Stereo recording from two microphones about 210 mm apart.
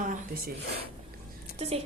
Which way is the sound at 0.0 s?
40° right (ahead or behind).